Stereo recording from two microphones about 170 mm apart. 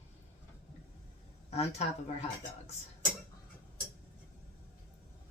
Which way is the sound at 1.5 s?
40° left (ahead or behind).